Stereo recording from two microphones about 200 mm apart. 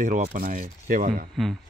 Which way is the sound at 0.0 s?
40° right (ahead or behind).